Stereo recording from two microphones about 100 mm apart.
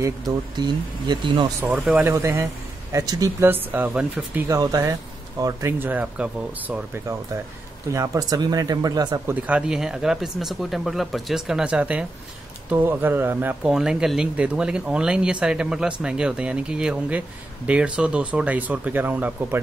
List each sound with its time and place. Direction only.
0.6 s speech: 50° right (ahead or behind)
1.7 s speech: 15° right (ahead or behind)
2.0 s speech: 30° right (ahead or behind)
3.4 s speech: 20° right (ahead or behind)
4.5 s speech: 35° right (ahead or behind)
5.9 s speech: 15° right (ahead or behind)
7.9 s speech: 30° right (ahead or behind)
9.3 s speech: 10° right (ahead or behind)
13.7 s speech: 5° right (ahead or behind)